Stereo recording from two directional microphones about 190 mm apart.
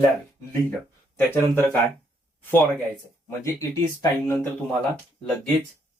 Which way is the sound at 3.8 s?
15° left (ahead or behind).